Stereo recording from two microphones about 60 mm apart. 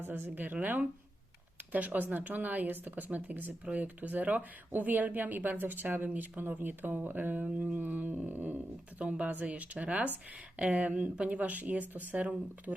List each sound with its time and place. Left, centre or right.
0.0 s a woman's voice: right